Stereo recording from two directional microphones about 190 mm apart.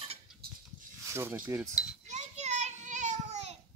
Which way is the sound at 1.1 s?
15° right (ahead or behind).